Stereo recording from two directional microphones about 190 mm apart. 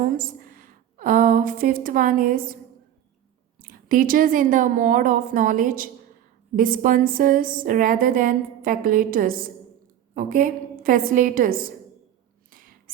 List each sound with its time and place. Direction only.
0.2 s a woman's voice: 45° right (ahead or behind)
3.6 s speech: 50° right (ahead or behind)